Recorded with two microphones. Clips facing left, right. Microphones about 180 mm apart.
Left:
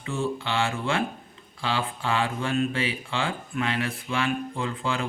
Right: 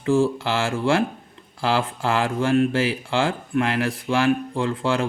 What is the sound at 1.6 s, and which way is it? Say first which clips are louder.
Speech: right 6 dB; 80° right.